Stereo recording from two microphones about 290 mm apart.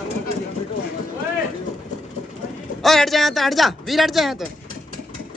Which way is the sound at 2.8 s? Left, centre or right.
Centre.